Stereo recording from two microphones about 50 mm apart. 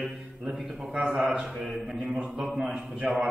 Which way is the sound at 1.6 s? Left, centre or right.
Centre.